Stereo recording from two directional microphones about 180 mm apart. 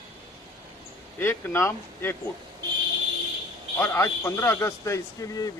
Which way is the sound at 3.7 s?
15° left (ahead or behind).